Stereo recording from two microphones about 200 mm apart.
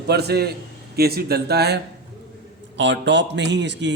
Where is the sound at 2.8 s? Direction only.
60° right (ahead or behind).